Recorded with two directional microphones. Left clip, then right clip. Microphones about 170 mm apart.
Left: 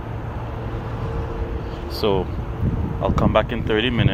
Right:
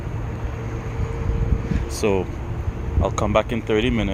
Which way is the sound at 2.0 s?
15° right (ahead or behind).